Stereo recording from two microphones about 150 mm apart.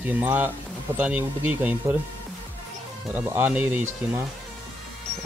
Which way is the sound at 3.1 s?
10° right (ahead or behind).